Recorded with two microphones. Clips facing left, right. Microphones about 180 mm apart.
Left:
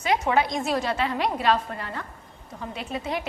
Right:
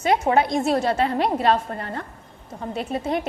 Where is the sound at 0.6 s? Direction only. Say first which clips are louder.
Right 5 dB; 25° right (ahead or behind).